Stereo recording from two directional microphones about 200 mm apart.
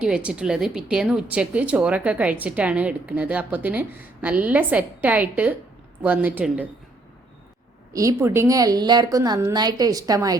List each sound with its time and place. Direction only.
0.0 s a woman's voice: 5° right (ahead or behind)
7.9 s a woman's voice: 15° right (ahead or behind)